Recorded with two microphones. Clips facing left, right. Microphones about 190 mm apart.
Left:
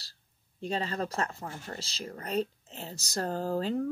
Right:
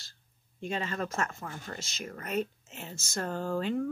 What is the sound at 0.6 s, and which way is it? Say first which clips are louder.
Speech: left 1 dB; 35° left (ahead or behind).